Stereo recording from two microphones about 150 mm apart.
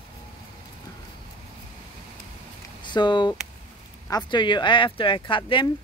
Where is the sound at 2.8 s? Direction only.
30° left (ahead or behind).